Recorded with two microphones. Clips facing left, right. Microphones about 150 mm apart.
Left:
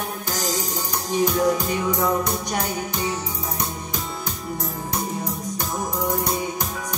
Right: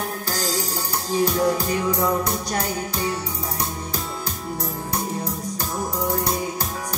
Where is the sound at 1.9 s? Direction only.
Centre (ahead or behind).